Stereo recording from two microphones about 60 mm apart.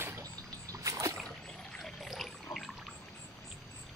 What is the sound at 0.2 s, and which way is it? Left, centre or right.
Rowboat, right.